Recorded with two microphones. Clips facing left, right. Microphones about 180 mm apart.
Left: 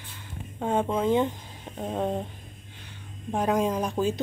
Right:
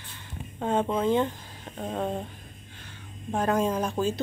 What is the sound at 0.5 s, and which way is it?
Speech, 5° left (ahead or behind).